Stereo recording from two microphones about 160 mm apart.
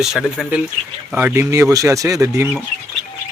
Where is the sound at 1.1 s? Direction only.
10° right (ahead or behind).